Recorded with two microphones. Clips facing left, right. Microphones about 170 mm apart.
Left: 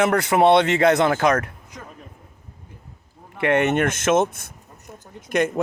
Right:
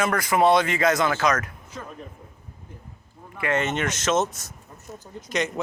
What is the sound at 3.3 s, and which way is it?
Speech, 65° left (ahead or behind).